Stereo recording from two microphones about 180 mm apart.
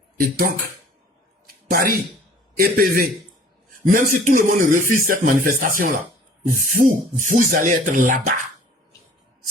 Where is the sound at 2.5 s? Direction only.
55° right (ahead or behind).